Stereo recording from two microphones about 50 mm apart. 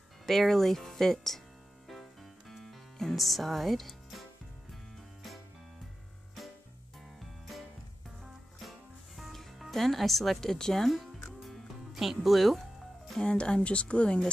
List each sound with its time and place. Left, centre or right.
0.3 s speech: centre
1.9 s music: centre
7.2 s music: centre
10.5 s speech: centre
11.4 s music: centre
13.2 s speech: centre